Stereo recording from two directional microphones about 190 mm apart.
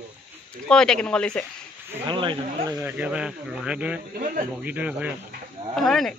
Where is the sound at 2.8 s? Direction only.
5° right (ahead or behind).